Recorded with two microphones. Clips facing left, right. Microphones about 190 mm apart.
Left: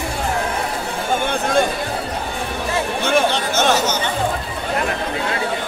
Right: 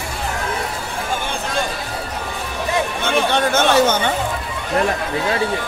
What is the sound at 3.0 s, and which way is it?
Chatter, 55° right (ahead or behind).